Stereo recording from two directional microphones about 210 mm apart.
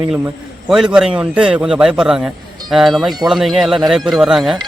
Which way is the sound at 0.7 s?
5° right (ahead or behind).